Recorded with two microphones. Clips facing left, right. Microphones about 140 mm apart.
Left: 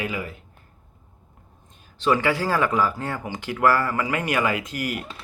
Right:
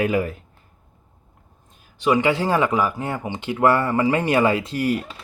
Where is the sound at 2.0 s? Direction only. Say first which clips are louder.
Right 3 dB; 15° right (ahead or behind).